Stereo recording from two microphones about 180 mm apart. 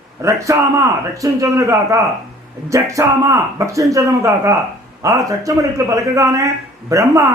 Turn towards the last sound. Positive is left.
turn(degrees=-15)  # may be behind; listen again after turning